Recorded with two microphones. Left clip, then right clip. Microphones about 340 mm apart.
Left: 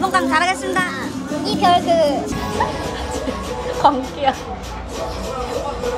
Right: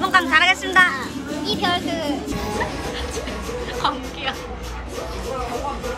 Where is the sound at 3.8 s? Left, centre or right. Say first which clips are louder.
Left 9 dB; centre.